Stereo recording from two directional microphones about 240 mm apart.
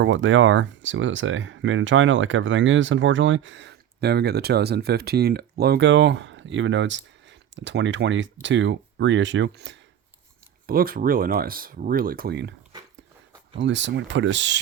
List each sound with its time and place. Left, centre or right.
0.0 s speech: right
13.6 s speech: right